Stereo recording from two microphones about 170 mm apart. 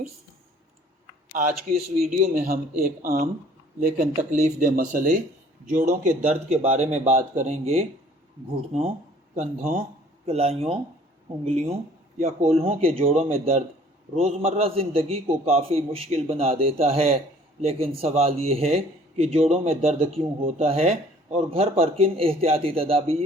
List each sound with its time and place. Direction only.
1.3 s a man's voice: 50° right (ahead or behind)
9.3 s a man's voice: 45° right (ahead or behind)